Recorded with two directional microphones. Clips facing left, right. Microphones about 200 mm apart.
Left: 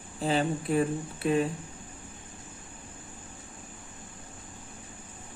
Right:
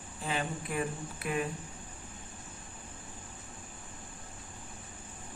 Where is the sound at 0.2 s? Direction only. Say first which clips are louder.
Left 8 dB; 35° left (ahead or behind).